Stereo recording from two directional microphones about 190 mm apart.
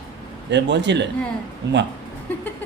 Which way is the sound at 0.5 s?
65° right (ahead or behind).